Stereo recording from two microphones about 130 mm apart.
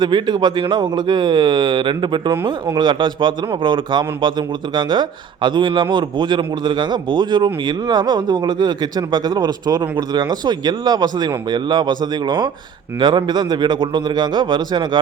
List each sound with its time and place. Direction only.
0.0 s a man's voice: 35° right (ahead or behind)
2.3 s speech: 20° right (ahead or behind)
2.7 s a man's voice: 35° right (ahead or behind)